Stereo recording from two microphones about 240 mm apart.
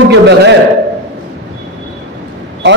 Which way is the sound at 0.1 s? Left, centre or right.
Right.